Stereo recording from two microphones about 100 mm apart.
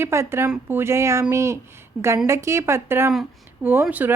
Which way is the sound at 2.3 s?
30° right (ahead or behind).